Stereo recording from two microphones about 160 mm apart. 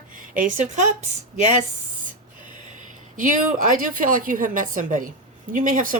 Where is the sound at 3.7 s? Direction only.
60° right (ahead or behind).